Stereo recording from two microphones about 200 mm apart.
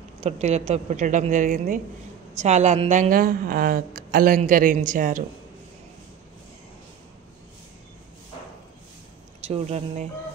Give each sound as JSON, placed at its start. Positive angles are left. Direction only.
{"t": 0.2, "sound": "a woman's voice", "side_deg": -35}
{"t": 9.4, "sound": "a woman's voice", "side_deg": -30}